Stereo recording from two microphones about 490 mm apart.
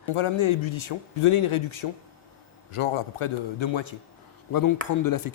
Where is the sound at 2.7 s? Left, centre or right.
Left.